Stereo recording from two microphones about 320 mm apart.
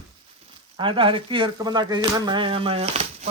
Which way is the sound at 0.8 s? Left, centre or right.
Centre.